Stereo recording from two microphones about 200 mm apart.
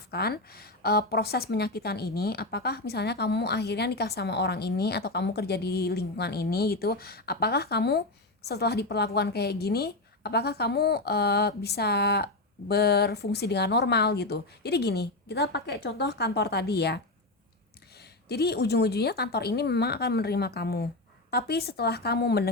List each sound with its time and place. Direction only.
0.1 s a woman's voice: 50° left (ahead or behind)
18.3 s a woman's voice: 55° left (ahead or behind)